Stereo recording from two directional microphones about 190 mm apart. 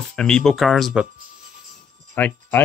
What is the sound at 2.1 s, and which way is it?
Speech, 10° left (ahead or behind).